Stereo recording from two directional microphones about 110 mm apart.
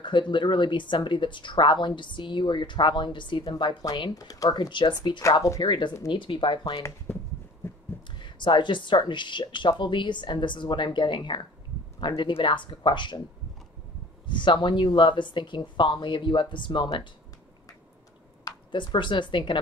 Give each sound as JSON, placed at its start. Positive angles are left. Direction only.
{"t": 0.0, "sound": "speech", "side_deg": 45}
{"t": 7.1, "sound": "a sound", "side_deg": 20}
{"t": 7.6, "sound": "heart sounds", "side_deg": 20}
{"t": 8.2, "sound": "speech", "side_deg": 45}
{"t": 14.2, "sound": "speech", "side_deg": 45}
{"t": 18.4, "sound": "speech", "side_deg": 40}